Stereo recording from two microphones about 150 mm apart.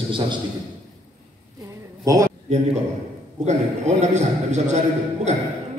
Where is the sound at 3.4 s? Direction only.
50° right (ahead or behind).